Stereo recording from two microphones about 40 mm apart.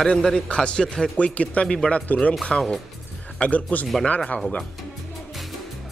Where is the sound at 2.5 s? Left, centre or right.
Left.